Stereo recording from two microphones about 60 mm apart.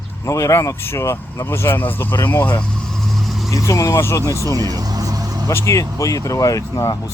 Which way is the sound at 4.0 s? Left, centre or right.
Left.